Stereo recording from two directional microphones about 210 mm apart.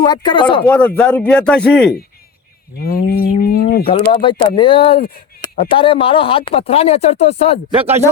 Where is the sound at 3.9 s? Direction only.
25° left (ahead or behind).